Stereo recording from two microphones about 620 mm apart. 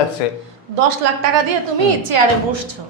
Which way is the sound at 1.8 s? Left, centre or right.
Right.